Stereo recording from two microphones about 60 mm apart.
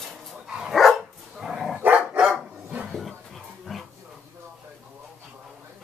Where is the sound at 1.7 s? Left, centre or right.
Right.